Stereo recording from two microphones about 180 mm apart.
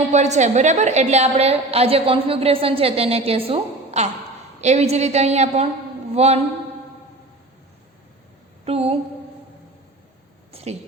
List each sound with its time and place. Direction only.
0.1 s a woman's voice: 40° right (ahead or behind)
8.6 s a woman's voice: 35° right (ahead or behind)
10.5 s a sound: 35° right (ahead or behind)